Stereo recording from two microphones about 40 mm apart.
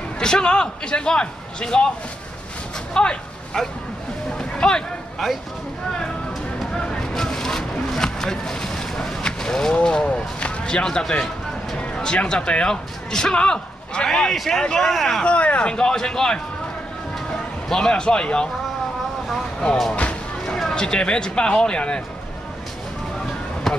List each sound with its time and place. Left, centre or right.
0.2 s speech: centre
2.9 s a sound: left
6.7 s a sound: centre
9.8 s a man's voice: left
14.3 s speech: centre
14.6 s a man's voice: centre
14.9 s speech: centre
15.2 s speech: left
17.6 s speech: centre
19.9 s music: left
20.7 s speech: left